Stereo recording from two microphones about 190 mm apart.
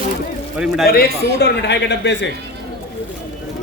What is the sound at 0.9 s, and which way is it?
Speech, 55° left (ahead or behind).